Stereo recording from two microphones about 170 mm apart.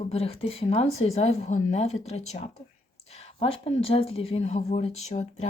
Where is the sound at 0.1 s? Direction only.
35° left (ahead or behind).